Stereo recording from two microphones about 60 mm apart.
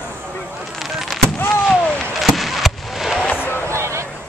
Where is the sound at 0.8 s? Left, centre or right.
Centre.